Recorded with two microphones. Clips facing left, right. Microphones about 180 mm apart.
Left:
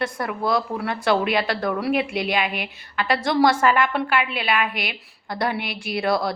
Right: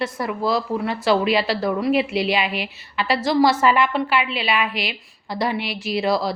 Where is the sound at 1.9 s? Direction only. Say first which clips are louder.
Right 3 dB; 50° left (ahead or behind).